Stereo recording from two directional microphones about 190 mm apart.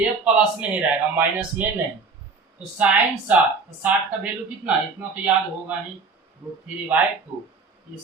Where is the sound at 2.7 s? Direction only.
5° right (ahead or behind).